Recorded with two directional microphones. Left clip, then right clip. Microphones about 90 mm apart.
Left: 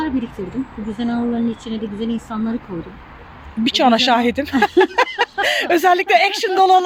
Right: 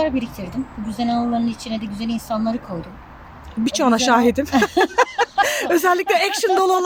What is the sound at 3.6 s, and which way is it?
Speech, 40° right (ahead or behind).